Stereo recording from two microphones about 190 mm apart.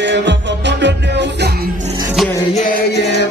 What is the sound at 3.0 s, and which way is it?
Music, 60° left (ahead or behind).